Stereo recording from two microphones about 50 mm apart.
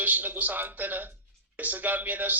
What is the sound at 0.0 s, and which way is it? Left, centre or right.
A man's voice, right.